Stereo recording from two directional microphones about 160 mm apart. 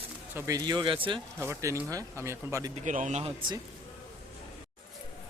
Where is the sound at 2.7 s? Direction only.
50° right (ahead or behind).